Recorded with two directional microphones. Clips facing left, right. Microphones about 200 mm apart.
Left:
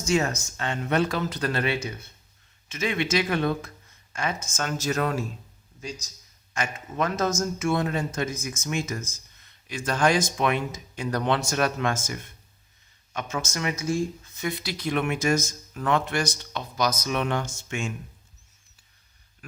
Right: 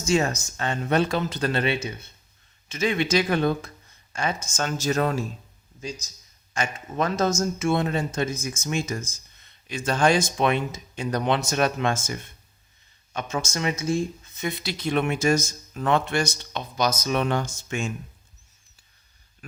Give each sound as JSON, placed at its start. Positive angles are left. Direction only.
{"t": 0.0, "sound": "speech", "side_deg": -25}
{"t": 6.5, "sound": "speech", "side_deg": -30}